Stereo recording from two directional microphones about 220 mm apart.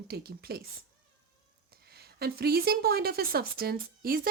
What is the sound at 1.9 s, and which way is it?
Speech, 45° right (ahead or behind).